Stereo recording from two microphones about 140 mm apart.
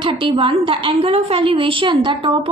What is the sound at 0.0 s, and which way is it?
A woman's voice, 35° right (ahead or behind).